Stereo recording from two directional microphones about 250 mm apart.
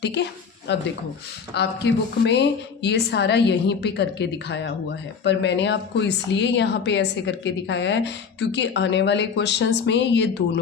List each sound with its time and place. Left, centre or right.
0.0 s a woman's voice: left